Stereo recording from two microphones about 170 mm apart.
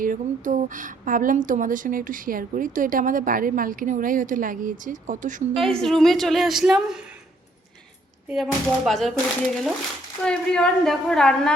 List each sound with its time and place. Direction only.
0.0 s speech: 50° right (ahead or behind)
5.5 s a woman's voice: centre (ahead or behind)
8.3 s a woman's voice: centre (ahead or behind)
10.2 s a woman's voice: 5° left (ahead or behind)